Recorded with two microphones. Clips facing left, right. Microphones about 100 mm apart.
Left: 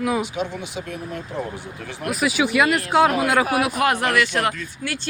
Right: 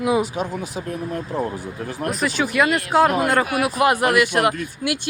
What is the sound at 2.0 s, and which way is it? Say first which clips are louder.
Speech: left 2 dB; 5° left (ahead or behind).